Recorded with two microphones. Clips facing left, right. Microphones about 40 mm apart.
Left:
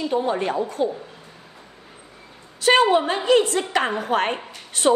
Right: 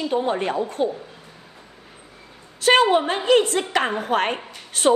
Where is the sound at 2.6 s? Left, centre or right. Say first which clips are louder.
Even; right.